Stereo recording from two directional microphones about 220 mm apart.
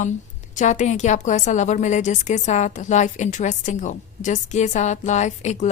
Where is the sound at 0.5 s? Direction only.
35° left (ahead or behind).